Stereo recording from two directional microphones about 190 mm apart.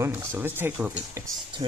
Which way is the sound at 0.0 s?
15° right (ahead or behind).